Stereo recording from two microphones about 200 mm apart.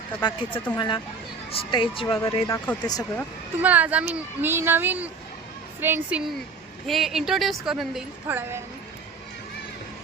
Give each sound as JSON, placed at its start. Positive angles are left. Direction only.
{"t": 0.2, "sound": "speech", "side_deg": 20}
{"t": 3.6, "sound": "a woman's voice", "side_deg": -10}